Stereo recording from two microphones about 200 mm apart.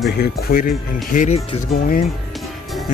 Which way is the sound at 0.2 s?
50° left (ahead or behind).